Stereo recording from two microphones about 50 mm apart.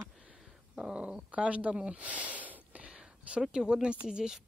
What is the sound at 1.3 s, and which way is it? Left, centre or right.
Speech, right.